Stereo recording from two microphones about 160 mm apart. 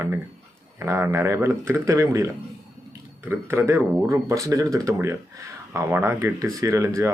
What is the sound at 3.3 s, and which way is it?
Speech, 15° right (ahead or behind).